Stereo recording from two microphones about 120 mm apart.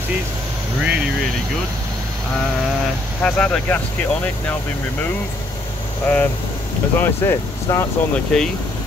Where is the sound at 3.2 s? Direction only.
5° left (ahead or behind).